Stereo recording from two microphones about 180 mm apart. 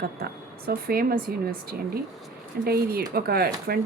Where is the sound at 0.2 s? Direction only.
55° right (ahead or behind).